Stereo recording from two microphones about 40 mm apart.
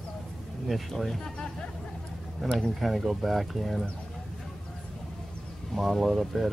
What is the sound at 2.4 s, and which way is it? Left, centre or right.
Speech, centre.